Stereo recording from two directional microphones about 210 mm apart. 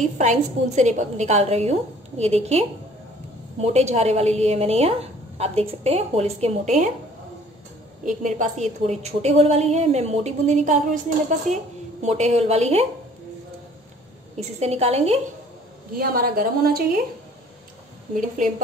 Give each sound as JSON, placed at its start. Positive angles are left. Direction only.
{"t": 0.0, "sound": "a woman's voice", "side_deg": -35}
{"t": 3.6, "sound": "a woman's voice", "side_deg": -30}
{"t": 8.0, "sound": "a woman's voice", "side_deg": -40}
{"t": 14.3, "sound": "a woman's voice", "side_deg": -30}
{"t": 16.0, "sound": "a woman's voice", "side_deg": -45}